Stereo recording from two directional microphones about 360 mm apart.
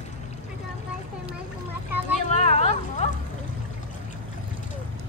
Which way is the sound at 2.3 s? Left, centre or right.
Centre.